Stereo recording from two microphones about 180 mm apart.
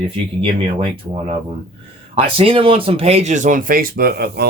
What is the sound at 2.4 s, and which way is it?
Speech, 30° right (ahead or behind).